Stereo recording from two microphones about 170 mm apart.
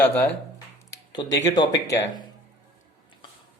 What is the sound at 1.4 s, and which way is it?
Speech, 20° left (ahead or behind).